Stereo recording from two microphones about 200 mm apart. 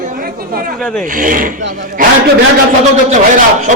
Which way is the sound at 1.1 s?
45° right (ahead or behind).